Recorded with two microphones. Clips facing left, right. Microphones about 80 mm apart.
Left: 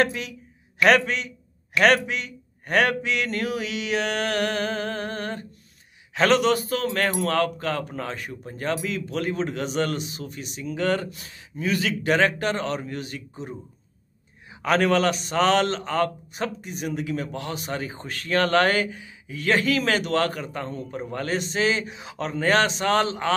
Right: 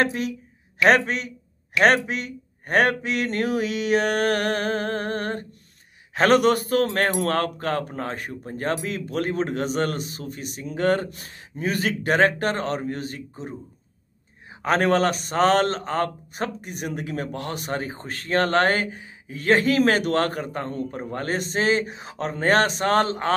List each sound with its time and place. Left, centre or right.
0.0 s a man's voice: right
14.6 s a man's voice: right